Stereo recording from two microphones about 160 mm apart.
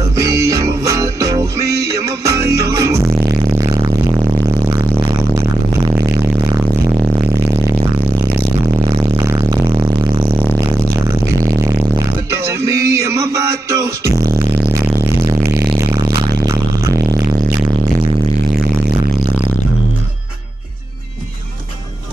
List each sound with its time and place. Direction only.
0.1 s music: 20° right (ahead or behind)
12.3 s music: 20° right (ahead or behind)
16.1 s a sound: 20° right (ahead or behind)